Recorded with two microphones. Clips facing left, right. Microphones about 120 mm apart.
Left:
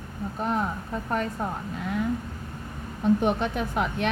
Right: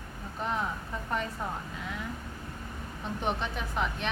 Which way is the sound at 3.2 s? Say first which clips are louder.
Left 7 dB; 55° left (ahead or behind).